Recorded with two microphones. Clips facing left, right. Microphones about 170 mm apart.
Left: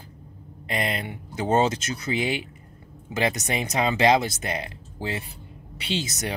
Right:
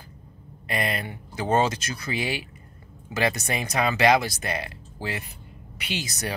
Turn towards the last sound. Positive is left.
turn(degrees=25)  # may be behind; listen again after turning